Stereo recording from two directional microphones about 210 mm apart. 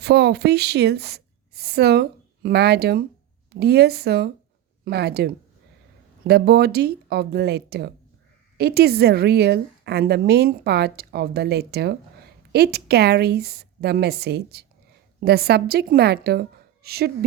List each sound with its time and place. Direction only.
0.0 s a woman's voice: 50° right (ahead or behind)